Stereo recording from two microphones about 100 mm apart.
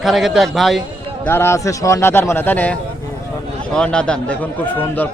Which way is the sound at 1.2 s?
25° left (ahead or behind).